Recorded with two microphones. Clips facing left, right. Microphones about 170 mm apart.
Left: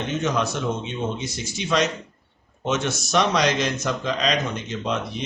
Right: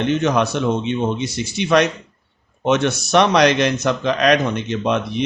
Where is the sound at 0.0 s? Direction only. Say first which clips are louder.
Right 6 dB; 65° right (ahead or behind).